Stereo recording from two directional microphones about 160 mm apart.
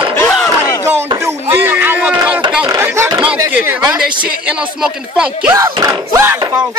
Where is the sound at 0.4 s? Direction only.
20° left (ahead or behind).